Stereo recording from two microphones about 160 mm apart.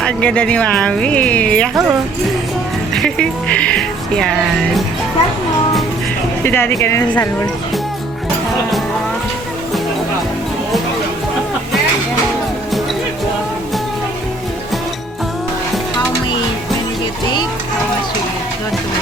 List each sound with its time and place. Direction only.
0.0 s speech: 5° left (ahead or behind)
2.9 s speech: 5° left (ahead or behind)
6.4 s speech: 15° left (ahead or behind)